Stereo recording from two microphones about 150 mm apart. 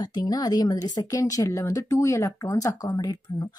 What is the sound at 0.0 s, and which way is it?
Speech, 25° left (ahead or behind).